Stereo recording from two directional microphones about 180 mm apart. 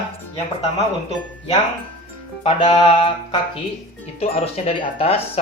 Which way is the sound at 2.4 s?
35° left (ahead or behind).